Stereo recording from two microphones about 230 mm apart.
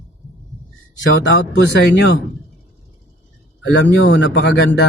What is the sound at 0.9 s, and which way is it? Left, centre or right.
Speech, left.